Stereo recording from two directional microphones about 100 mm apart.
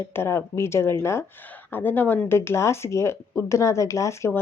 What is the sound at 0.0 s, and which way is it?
Speech, 25° left (ahead or behind).